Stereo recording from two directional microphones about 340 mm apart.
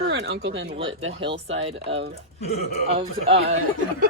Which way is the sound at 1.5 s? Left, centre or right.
Centre.